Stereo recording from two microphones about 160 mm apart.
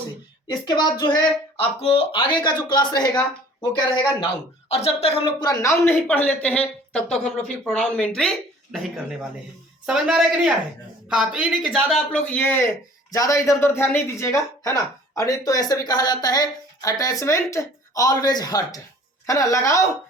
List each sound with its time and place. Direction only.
0.6 s speech: 25° left (ahead or behind)
4.7 s speech: 40° left (ahead or behind)
5.4 s a man's voice: 20° left (ahead or behind)